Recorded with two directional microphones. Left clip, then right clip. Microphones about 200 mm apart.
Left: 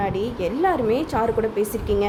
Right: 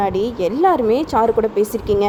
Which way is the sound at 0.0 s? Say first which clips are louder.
Right 6 dB; 35° right (ahead or behind).